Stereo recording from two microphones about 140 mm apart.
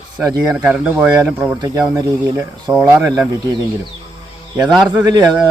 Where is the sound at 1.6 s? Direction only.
25° right (ahead or behind).